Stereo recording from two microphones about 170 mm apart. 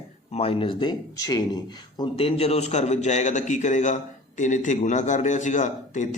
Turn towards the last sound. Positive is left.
turn(degrees=45)  # may be behind; listen again after turning